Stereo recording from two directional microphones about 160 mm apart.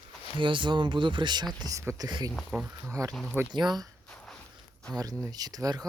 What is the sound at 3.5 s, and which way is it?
Speech, 25° right (ahead or behind).